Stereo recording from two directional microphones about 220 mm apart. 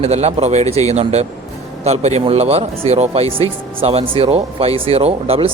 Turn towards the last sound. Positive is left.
turn(degrees=-25)  # may be behind; listen again after turning